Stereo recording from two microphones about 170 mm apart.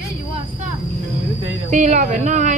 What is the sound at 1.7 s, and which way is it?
Speech, 45° right (ahead or behind).